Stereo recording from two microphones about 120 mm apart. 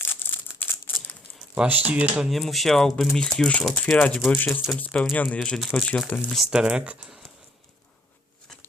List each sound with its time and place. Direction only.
0.0 s crumpling: 15° left (ahead or behind)
1.5 s speech: 10° right (ahead or behind); by 6.2 s 10° left (ahead or behind)
6.2 s speech: centre (ahead or behind)